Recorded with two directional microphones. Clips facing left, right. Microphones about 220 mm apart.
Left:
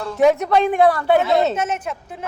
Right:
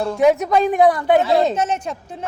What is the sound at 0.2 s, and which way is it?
Speech, 5° right (ahead or behind).